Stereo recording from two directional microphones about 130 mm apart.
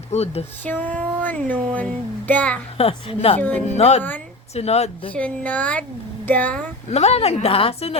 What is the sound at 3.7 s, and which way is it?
Speech, 55° left (ahead or behind).